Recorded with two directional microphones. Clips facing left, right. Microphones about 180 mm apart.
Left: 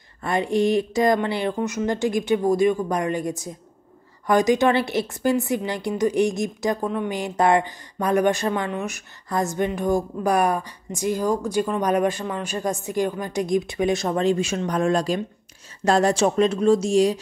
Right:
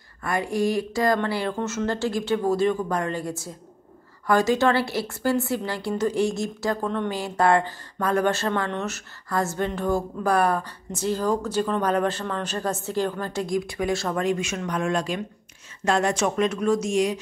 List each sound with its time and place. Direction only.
0.2 s a woman's voice: 25° left (ahead or behind)